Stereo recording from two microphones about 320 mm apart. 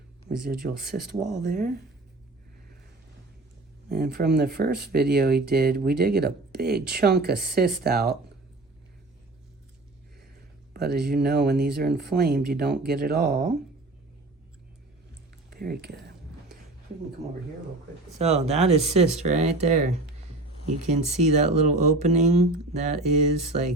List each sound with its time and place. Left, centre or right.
0.3 s speech: centre
1.1 s speech: right
3.8 s speech: right
11.0 s speech: right
15.4 s speech: right
18.2 s speech: right